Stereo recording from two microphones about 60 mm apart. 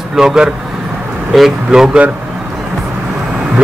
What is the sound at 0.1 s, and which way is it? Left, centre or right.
Speech, centre.